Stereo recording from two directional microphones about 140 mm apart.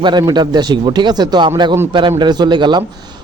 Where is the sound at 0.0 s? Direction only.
30° right (ahead or behind).